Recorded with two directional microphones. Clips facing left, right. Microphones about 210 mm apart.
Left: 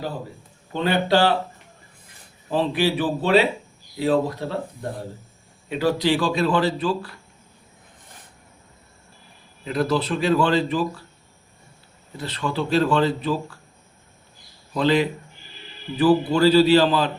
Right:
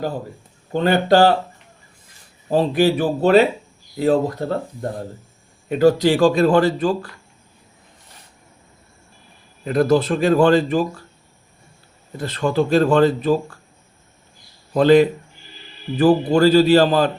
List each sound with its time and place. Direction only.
0.7 s a man's voice: 45° right (ahead or behind)
2.5 s a man's voice: 45° right (ahead or behind)
9.6 s a man's voice: 50° right (ahead or behind)
12.1 s a man's voice: 45° right (ahead or behind)
14.7 s a man's voice: 50° right (ahead or behind)